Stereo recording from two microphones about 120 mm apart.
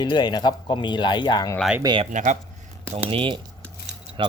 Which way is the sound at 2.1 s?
90° right.